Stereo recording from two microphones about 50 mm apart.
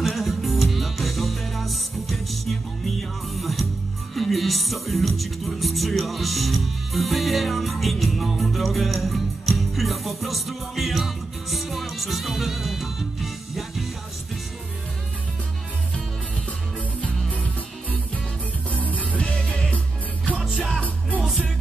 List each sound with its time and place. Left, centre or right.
0.0 s music: centre
17.3 s music: left
20.3 s music: centre